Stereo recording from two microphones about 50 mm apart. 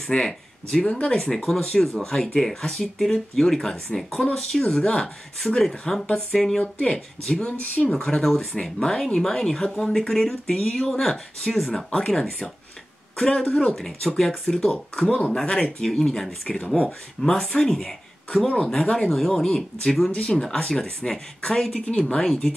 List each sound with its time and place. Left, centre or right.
0.1 s speech: left
1.3 s speech: centre
7.4 s speech: left
7.8 s speech: centre
13.7 s speech: centre
15.0 s a woman's voice: left; by 22.5 s centre